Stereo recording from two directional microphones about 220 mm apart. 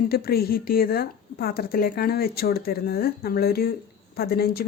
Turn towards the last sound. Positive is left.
turn(degrees=45)  # may be behind; listen again after turning